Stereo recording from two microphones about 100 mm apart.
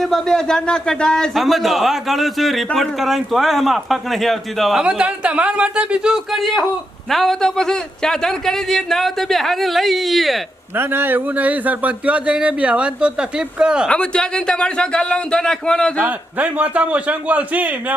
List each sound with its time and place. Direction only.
0.0 s speech: 5° left (ahead or behind)
4.8 s speech: 10° right (ahead or behind)
10.8 s speech: 20° right (ahead or behind)
13.8 s speech: 10° left (ahead or behind)
16.0 s speech: 15° right (ahead or behind)